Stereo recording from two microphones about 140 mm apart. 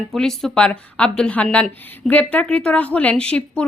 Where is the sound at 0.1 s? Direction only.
5° left (ahead or behind).